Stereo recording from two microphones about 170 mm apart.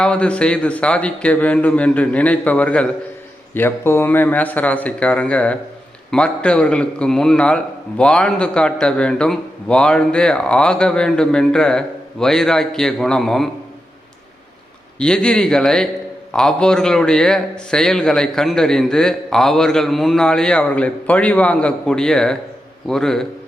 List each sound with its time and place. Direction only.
0.0 s a man's voice: 5° left (ahead or behind)
14.9 s a man's voice: 5° left (ahead or behind)